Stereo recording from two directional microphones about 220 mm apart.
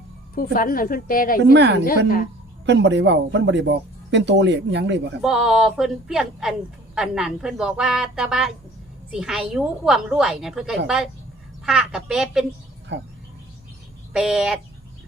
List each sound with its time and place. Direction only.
0.3 s a woman's voice: 40° left (ahead or behind)
2.6 s a man's voice: 55° right (ahead or behind)
5.2 s a woman's voice: 5° right (ahead or behind)
12.9 s a man's voice: 55° right (ahead or behind)
14.1 s a woman's voice: 5° right (ahead or behind)